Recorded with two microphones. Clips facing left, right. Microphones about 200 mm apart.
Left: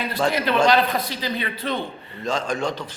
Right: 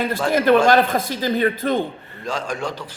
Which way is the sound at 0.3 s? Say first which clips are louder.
Right 5 dB; 45° right (ahead or behind).